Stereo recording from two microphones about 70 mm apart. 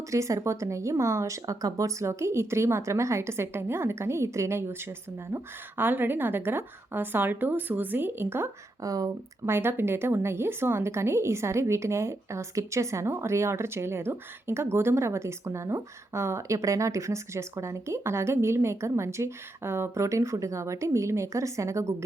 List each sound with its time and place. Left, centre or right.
0.1 s speech: right
8.8 s speech: right
9.5 s a woman's voice: right